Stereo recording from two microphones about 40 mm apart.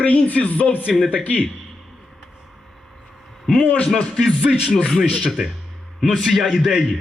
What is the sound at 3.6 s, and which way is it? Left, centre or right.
Speech, left.